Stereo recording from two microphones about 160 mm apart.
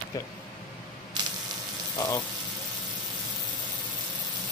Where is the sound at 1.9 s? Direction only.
20° left (ahead or behind).